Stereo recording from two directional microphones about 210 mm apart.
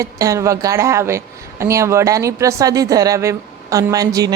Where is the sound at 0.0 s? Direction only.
15° right (ahead or behind).